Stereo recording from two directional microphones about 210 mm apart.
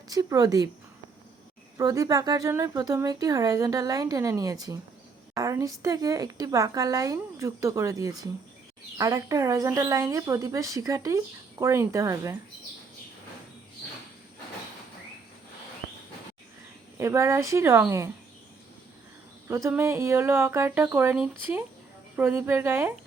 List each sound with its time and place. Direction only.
0.1 s speech: 15° right (ahead or behind)
1.8 s a woman's voice: 15° right (ahead or behind)
17.0 s speech: 15° right (ahead or behind)
19.5 s speech: 15° right (ahead or behind)